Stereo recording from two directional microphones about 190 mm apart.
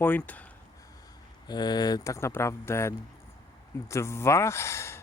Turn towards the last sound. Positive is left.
turn(degrees=15)  # may be behind; listen again after turning